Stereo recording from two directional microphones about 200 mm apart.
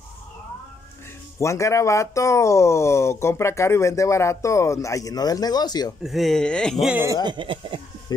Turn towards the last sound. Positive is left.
turn(degrees=-25)  # may be behind; listen again after turning